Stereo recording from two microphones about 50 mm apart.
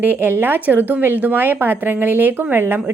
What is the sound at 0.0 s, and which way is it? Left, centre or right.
Speech, right.